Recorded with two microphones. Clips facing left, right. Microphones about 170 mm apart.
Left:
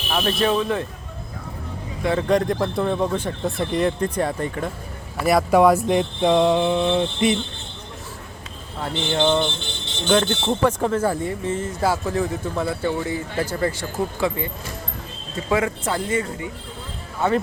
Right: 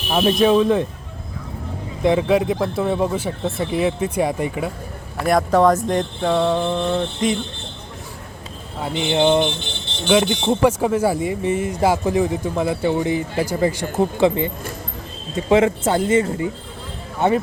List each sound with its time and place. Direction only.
0.1 s speech: 15° right (ahead or behind)
2.0 s speech: 10° right (ahead or behind)
5.2 s speech: 5° left (ahead or behind)
8.8 s speech: 10° right (ahead or behind)